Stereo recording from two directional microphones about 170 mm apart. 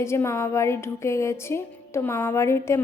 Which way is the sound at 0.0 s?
15° left (ahead or behind).